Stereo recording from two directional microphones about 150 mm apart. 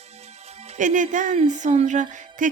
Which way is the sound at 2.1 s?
55° right (ahead or behind).